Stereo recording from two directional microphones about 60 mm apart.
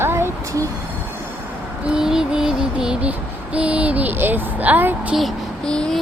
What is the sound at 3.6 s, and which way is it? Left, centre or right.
Speech, centre.